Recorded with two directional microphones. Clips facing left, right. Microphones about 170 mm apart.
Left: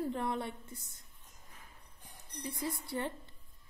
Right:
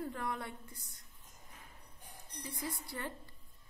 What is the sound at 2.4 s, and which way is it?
Speech, 25° left (ahead or behind).